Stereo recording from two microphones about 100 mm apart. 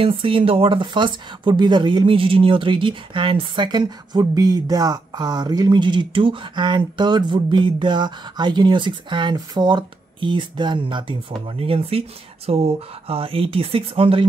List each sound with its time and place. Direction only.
0.0 s speech: 60° right (ahead or behind)
11.5 s speech: 75° right (ahead or behind)
12.4 s speech: 90° right; by 14.2 s 65° right (ahead or behind)